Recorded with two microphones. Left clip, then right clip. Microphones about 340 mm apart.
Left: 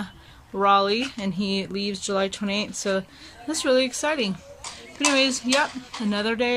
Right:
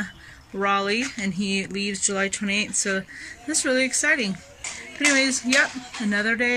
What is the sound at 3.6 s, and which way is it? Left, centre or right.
Speech, centre.